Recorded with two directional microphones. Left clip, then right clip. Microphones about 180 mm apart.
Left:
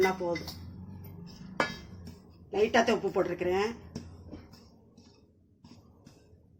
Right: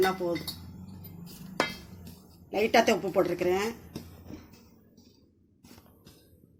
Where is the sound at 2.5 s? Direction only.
35° right (ahead or behind).